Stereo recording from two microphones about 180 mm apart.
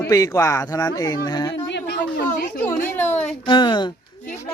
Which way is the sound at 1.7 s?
70° left (ahead or behind).